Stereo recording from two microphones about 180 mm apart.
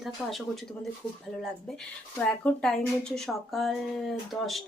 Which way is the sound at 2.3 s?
5° left (ahead or behind).